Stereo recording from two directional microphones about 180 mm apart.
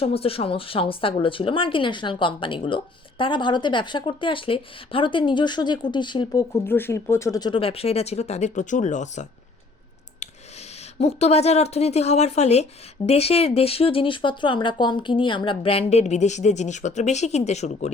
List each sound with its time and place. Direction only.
0.0 s speech: 35° left (ahead or behind)
10.9 s speech: 35° left (ahead or behind)